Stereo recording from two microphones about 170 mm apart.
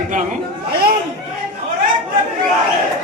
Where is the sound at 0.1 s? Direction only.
50° right (ahead or behind).